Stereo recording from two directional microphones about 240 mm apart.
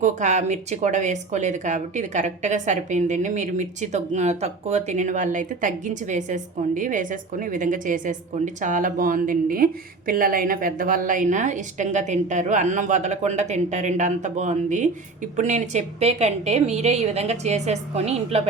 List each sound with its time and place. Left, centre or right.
0.0 s a woman's voice: right